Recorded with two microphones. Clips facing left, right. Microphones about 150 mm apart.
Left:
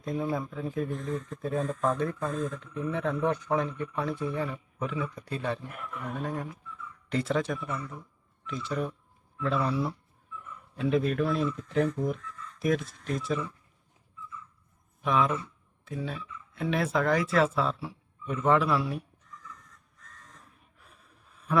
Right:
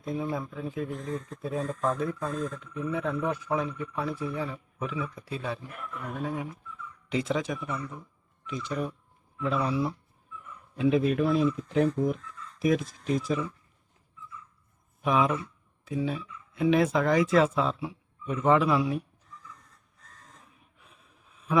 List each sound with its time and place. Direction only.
0.0 s speech: 5° right (ahead or behind)
15.0 s speech: 5° right (ahead or behind)
20.0 s crow: 30° right (ahead or behind)
20.6 s a sound: centre (ahead or behind)